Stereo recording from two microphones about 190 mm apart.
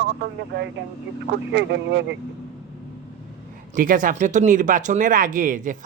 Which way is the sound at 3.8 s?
45° right (ahead or behind).